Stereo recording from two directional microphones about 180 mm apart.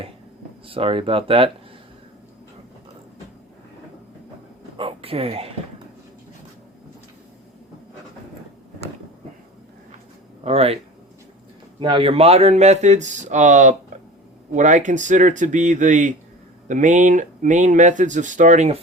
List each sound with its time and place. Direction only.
0.7 s speech: 30° right (ahead or behind)
4.8 s a sound: 30° right (ahead or behind)
10.4 s speech: 35° right (ahead or behind)
11.8 s speech: 30° right (ahead or behind)